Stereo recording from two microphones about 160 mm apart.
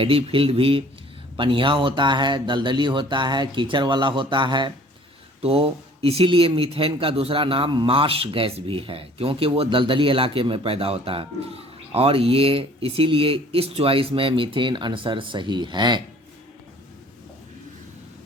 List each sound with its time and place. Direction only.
0.0 s speech: 35° right (ahead or behind)